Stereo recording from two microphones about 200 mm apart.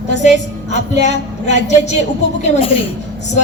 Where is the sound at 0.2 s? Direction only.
35° left (ahead or behind).